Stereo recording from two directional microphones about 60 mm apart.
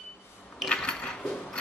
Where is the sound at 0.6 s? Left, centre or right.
Centre.